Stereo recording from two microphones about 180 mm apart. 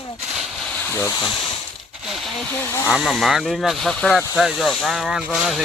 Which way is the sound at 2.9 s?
Centre (ahead or behind).